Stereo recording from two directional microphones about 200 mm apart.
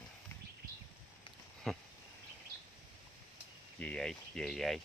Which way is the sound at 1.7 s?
Centre (ahead or behind).